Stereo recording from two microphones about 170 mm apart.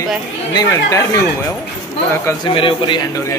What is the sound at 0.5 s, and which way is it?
Speech, 20° left (ahead or behind).